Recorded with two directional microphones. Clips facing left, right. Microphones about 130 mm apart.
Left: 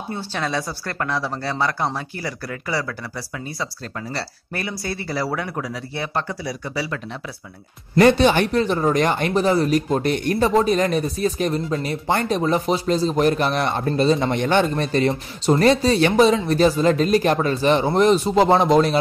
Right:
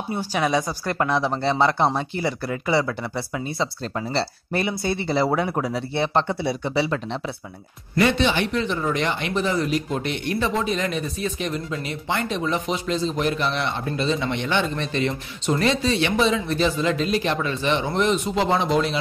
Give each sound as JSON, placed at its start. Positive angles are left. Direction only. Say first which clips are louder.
{"t": 0.1, "sound": "speech", "louder": "right 3 dB", "side_deg": -15}
{"t": 8.0, "sound": "speech", "louder": "left 6 dB", "side_deg": 45}